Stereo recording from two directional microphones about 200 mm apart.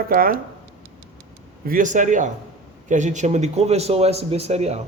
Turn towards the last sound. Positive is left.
turn(degrees=-30)  # may be behind; listen again after turning